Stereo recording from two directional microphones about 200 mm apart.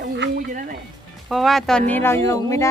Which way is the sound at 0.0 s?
60° right (ahead or behind).